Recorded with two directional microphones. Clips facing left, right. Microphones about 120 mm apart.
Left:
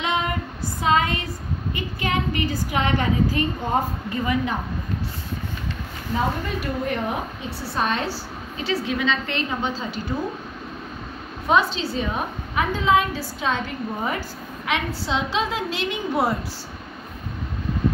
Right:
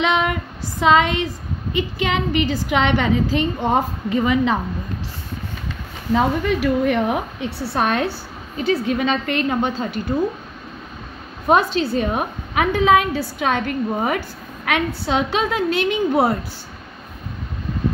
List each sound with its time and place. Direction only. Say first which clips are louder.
0.0 s a woman's voice: right 5 dB; 85° right
6.1 s a woman's voice: right 7 dB; 90° right; by 10.1 s 55° right (ahead or behind)
11.4 s a woman's voice: right 4 dB; 50° right (ahead or behind)